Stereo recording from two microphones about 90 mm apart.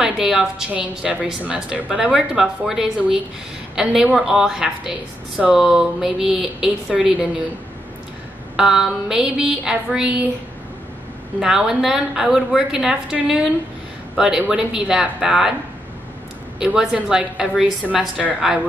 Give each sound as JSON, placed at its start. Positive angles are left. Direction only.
{"t": 0.0, "sound": "a woman's voice", "side_deg": -5}
{"t": 8.5, "sound": "a woman's voice", "side_deg": -5}
{"t": 11.3, "sound": "a woman's voice", "side_deg": -5}
{"t": 16.5, "sound": "a woman's voice", "side_deg": -5}